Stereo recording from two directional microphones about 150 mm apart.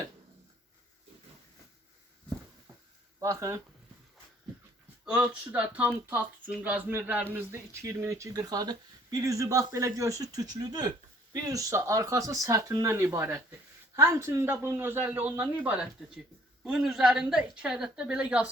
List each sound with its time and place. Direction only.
3.2 s speech: 20° right (ahead or behind)
5.1 s a woman's voice: 10° right (ahead or behind)